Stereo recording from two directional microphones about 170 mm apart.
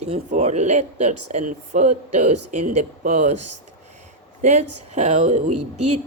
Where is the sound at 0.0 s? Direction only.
40° right (ahead or behind).